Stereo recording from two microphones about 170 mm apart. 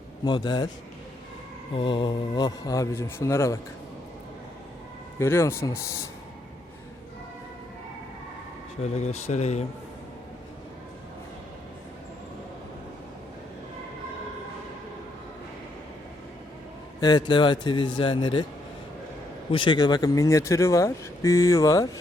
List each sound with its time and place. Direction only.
0.3 s speech: 25° left (ahead or behind)
1.7 s speech: 30° left (ahead or behind)
5.2 s speech: 15° left (ahead or behind)
8.8 s speech: 40° left (ahead or behind)
17.0 s speech: 25° left (ahead or behind)
19.5 s speech: 30° left (ahead or behind)